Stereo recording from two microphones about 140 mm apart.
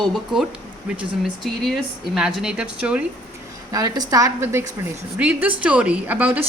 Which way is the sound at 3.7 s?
25° right (ahead or behind).